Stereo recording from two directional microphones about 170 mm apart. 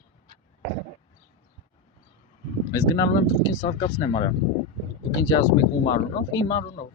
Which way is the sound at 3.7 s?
35° left (ahead or behind).